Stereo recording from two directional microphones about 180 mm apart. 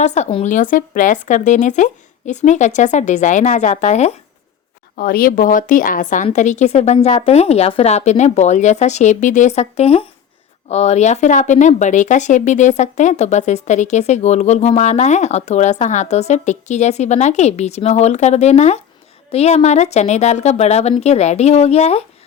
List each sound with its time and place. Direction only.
0.0 s speech: 40° left (ahead or behind)
4.9 s speech: 55° left (ahead or behind); by 22.0 s 35° left (ahead or behind)